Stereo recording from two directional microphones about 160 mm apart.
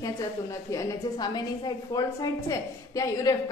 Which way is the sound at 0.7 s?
25° left (ahead or behind).